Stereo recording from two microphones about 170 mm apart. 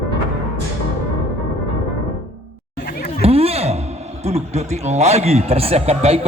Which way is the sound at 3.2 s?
35° right (ahead or behind).